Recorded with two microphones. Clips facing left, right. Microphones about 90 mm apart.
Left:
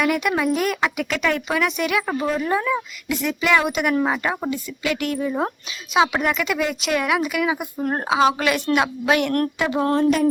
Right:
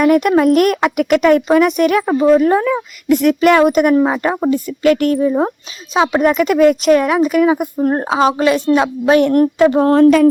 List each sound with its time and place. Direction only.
0.0 s a woman's voice: 45° right (ahead or behind)
0.5 s speech: 70° right (ahead or behind)
0.9 s speech: 55° right (ahead or behind)
1.5 s a woman's voice: 45° right (ahead or behind)
2.0 s speech: 25° right (ahead or behind)
2.4 s a woman's voice: 45° right (ahead or behind)
3.1 s a woman's voice: 55° right (ahead or behind)
3.9 s speech: 25° right (ahead or behind)
4.4 s a woman's voice: 45° right (ahead or behind)
6.2 s a woman's voice: 45° right (ahead or behind)